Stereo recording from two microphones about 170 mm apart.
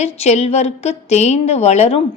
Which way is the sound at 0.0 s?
40° left (ahead or behind).